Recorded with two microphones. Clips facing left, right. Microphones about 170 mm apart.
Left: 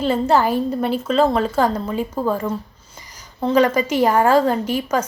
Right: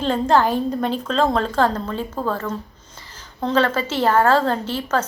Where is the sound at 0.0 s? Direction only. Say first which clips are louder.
Left 1 dB; 10° left (ahead or behind).